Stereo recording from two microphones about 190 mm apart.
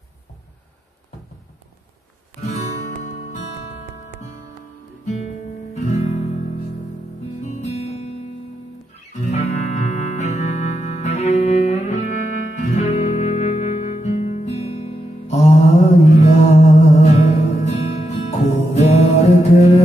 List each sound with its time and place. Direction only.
5.0 s music: 35° left (ahead or behind)
5.8 s guitar: 35° left (ahead or behind)
7.4 s music: 35° left (ahead or behind)
9.2 s music: 35° left (ahead or behind)